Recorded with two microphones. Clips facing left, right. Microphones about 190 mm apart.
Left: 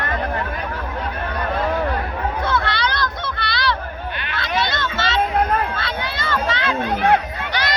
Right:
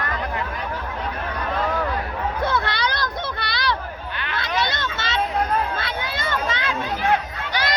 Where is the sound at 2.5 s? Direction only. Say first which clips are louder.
Left 2 dB; 55° left (ahead or behind).